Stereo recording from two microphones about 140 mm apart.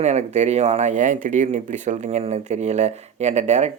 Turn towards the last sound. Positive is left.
turn(degrees=-55)  # may be behind; listen again after turning